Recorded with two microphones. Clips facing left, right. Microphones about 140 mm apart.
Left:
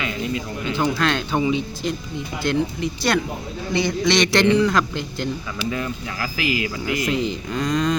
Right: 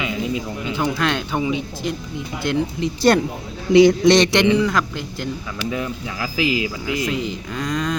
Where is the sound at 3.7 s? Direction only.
85° right.